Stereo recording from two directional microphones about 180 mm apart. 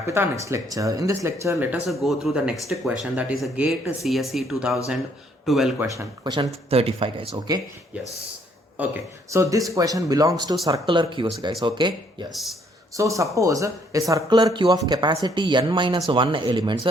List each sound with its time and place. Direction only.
0.1 s speech: 15° right (ahead or behind)
1.9 s speech: centre (ahead or behind)
5.8 s speech: 20° right (ahead or behind)
6.7 s speech: 30° right (ahead or behind)
8.8 s speech: 15° right (ahead or behind)
12.3 s speech: centre (ahead or behind)
12.9 s speech: 15° right (ahead or behind)